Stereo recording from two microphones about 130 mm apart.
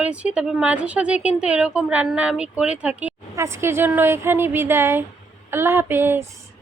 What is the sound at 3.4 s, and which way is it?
A woman's voice, 20° right (ahead or behind).